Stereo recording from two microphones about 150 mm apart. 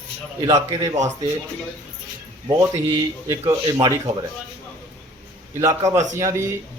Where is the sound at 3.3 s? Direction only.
25° right (ahead or behind).